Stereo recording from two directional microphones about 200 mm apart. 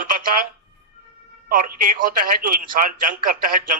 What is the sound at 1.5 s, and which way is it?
A man's voice, 40° right (ahead or behind).